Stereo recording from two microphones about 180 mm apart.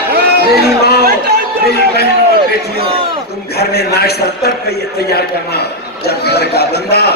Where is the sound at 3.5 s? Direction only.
60° left (ahead or behind).